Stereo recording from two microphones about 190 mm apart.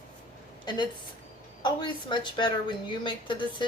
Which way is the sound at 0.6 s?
25° left (ahead or behind).